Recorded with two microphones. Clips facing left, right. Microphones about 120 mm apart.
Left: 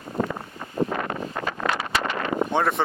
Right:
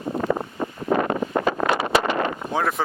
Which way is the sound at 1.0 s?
30° right (ahead or behind).